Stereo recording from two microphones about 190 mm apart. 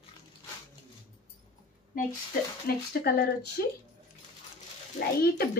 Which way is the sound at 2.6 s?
55° left (ahead or behind).